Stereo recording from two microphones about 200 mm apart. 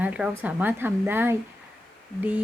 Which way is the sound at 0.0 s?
5° right (ahead or behind).